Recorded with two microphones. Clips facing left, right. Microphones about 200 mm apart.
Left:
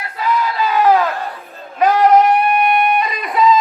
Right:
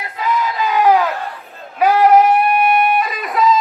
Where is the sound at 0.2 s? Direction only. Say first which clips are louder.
Left 1 dB; 15° right (ahead or behind).